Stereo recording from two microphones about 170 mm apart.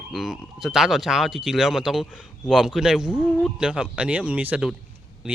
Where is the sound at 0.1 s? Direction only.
Centre (ahead or behind).